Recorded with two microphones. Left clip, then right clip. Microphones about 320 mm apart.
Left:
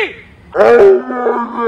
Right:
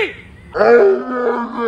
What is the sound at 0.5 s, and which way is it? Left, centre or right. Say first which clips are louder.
Wild animals: left 4 dB; left.